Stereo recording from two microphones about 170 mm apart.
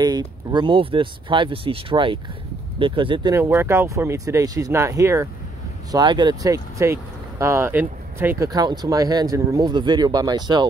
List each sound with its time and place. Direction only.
0.0 s speech: 25° right (ahead or behind)
3.3 s speech: 15° right (ahead or behind)
8.5 s speech: 20° right (ahead or behind)